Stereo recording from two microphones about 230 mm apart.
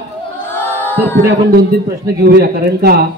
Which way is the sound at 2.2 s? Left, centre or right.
Right.